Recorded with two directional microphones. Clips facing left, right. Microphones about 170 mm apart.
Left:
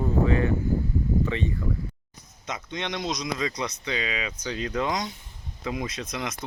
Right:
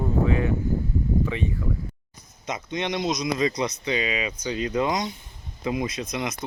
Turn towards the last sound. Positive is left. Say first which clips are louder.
# right 3 dB
turn(degrees=-10)  # may be behind; listen again after turning